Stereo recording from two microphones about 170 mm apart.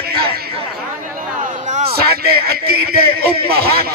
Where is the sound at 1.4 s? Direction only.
40° right (ahead or behind).